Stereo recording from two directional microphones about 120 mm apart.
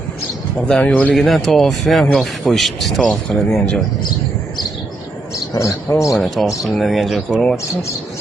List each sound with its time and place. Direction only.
0.7 s speech: 5° left (ahead or behind)
5.5 s a man's voice: 25° left (ahead or behind)
6.1 s speech: centre (ahead or behind)